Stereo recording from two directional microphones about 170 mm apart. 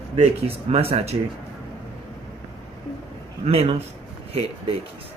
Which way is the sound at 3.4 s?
35° right (ahead or behind).